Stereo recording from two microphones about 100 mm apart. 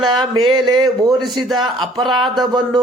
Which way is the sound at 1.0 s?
Centre (ahead or behind).